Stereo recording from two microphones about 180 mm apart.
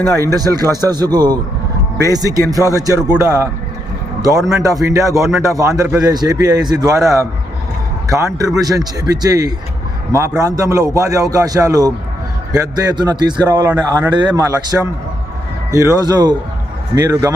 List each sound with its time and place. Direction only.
0.2 s a man's voice: 20° right (ahead or behind)
14.7 s speech: 10° right (ahead or behind)
15.7 s a man's voice: 20° right (ahead or behind)